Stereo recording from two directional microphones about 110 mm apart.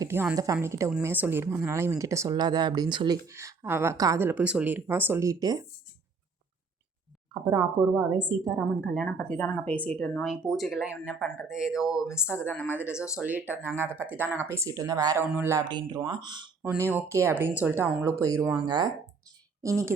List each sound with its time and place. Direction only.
0.1 s a woman's voice: 20° right (ahead or behind); by 3.2 s 40° right (ahead or behind)
3.2 s speech: 25° right (ahead or behind)
7.4 s a woman's voice: 40° right (ahead or behind)
8.6 s a woman's voice: 10° right (ahead or behind)
9.0 s a woman's voice: 10° left (ahead or behind); by 12.5 s 10° right (ahead or behind)
12.5 s speech: 20° left (ahead or behind)
12.7 s a woman's voice: 15° right (ahead or behind); by 15.2 s 30° right (ahead or behind)
15.2 s speech: 20° right (ahead or behind)
15.5 s a woman's voice: 40° right (ahead or behind)
16.6 s speech: 25° right (ahead or behind); by 18.9 s 45° right (ahead or behind)